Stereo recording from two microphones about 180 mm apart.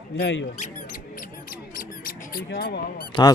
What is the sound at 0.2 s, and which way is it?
Speech, 90° left.